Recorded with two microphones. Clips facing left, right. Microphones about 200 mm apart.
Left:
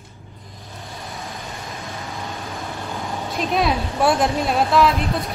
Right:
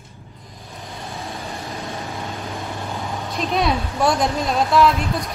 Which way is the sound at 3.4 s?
Centre (ahead or behind).